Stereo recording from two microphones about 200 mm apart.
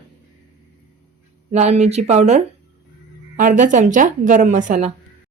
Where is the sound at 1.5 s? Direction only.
35° right (ahead or behind).